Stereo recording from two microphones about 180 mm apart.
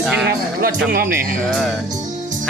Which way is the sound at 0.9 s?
55° right (ahead or behind).